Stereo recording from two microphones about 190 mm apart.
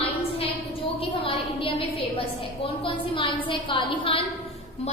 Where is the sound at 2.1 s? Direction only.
30° left (ahead or behind).